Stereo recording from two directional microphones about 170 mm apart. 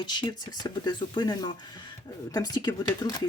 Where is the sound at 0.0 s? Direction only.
25° left (ahead or behind).